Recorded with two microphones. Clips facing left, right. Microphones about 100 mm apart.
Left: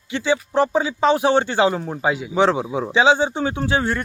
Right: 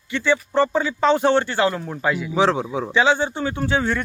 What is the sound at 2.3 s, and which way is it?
Speech, centre (ahead or behind).